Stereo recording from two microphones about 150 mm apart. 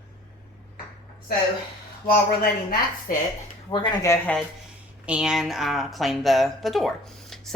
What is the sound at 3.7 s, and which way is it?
Speech, 30° left (ahead or behind).